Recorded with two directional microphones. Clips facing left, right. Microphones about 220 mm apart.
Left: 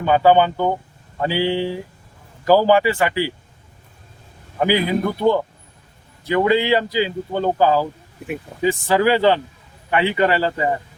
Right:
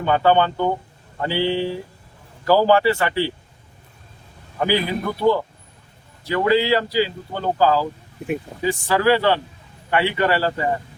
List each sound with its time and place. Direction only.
0.0 s speech: 10° left (ahead or behind)
4.6 s speech: 15° left (ahead or behind)